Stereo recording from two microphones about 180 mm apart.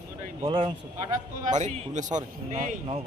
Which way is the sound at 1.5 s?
40° right (ahead or behind).